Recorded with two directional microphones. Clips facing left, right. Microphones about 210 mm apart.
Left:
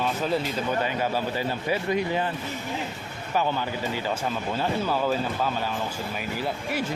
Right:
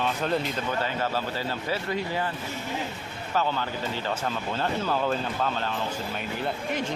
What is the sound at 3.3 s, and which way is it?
Speech, 15° left (ahead or behind).